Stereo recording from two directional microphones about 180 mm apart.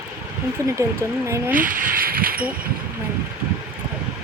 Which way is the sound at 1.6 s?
50° right (ahead or behind).